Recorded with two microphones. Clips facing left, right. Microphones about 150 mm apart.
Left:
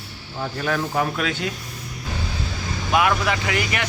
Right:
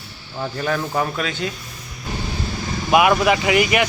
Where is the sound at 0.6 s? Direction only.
Centre (ahead or behind).